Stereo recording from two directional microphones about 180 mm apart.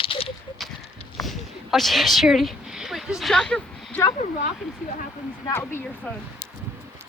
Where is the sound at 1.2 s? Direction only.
Centre (ahead or behind).